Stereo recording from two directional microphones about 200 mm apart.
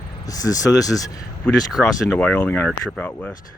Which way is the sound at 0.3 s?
15° left (ahead or behind).